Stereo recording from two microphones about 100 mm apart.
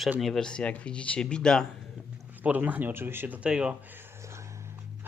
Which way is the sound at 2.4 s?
15° right (ahead or behind).